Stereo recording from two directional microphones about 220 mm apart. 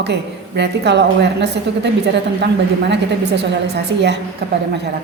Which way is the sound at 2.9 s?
50° right (ahead or behind).